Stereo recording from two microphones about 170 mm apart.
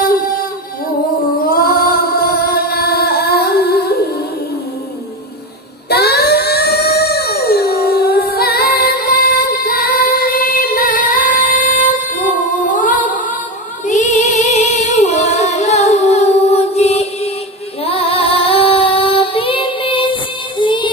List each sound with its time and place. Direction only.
1.5 s female singing: 60° left (ahead or behind)
5.9 s a sound: 70° left (ahead or behind); by 13.2 s 50° left (ahead or behind)
13.8 s female singing: 45° left (ahead or behind); by 20.9 s 30° left (ahead or behind)